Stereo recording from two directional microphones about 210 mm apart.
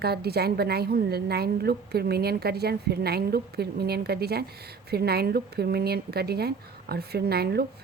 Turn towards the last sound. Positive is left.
turn(degrees=-50)  # may be behind; listen again after turning